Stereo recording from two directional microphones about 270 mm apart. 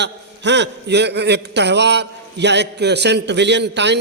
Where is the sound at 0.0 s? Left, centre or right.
Right.